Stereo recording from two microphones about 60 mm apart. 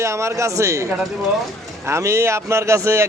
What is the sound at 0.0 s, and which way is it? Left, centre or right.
Speech, right.